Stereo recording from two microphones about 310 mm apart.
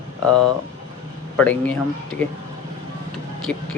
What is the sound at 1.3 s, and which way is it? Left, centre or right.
Speech, centre.